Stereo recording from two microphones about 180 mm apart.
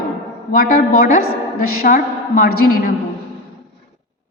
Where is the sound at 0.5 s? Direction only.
55° left (ahead or behind).